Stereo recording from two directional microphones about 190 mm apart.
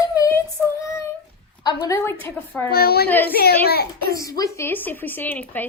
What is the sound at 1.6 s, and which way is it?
Speech, 20° left (ahead or behind).